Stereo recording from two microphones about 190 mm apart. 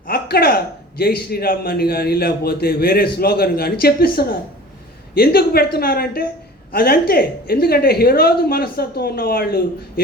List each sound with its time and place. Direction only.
0.1 s a man's voice: 55° left (ahead or behind)